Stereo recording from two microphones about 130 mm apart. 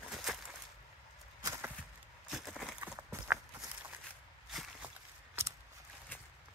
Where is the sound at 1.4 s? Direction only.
20° right (ahead or behind).